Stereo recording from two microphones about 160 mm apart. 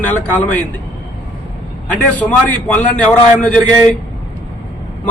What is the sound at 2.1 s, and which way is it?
A man's voice, 10° left (ahead or behind).